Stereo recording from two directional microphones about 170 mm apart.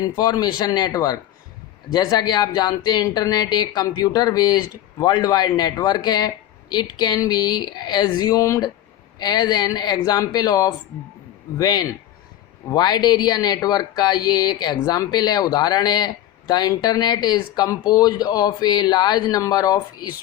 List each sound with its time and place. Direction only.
0.0 s speech: 20° left (ahead or behind)